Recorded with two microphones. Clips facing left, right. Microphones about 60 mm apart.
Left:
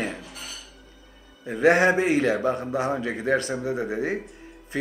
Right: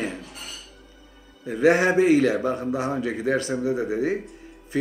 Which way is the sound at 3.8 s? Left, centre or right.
Left.